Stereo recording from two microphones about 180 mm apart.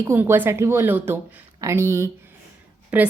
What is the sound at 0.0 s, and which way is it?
Speech, 15° right (ahead or behind).